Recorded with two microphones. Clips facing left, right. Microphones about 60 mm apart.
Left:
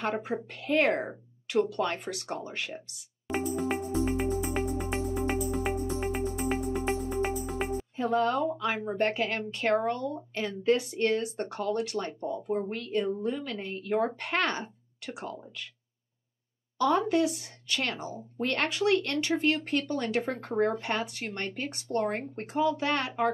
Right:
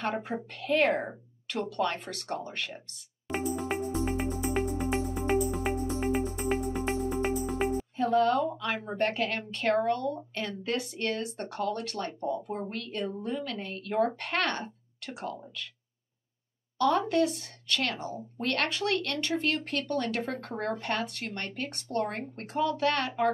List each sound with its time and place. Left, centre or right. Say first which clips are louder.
0.0 s speech: left 1 dB; centre
3.3 s music: left 1 dB; centre
7.9 s speech: right 2 dB; centre
16.7 s speech: even; centre